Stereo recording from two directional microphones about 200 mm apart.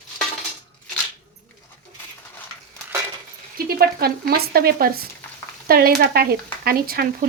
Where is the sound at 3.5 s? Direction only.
50° right (ahead or behind).